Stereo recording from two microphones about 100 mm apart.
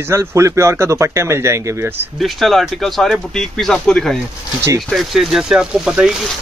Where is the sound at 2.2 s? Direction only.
Centre (ahead or behind).